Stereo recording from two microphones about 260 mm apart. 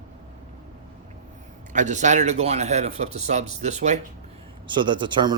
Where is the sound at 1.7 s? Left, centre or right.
Right.